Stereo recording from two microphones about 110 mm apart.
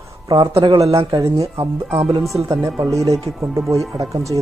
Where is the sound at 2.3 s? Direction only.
30° right (ahead or behind).